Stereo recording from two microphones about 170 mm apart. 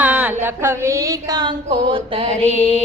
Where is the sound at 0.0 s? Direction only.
10° right (ahead or behind); by 2.3 s 30° right (ahead or behind).